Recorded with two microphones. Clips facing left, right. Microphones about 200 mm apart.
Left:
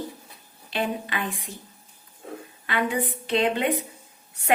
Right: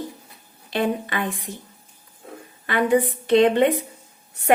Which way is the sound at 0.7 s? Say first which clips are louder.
Right 5 dB; 45° right (ahead or behind).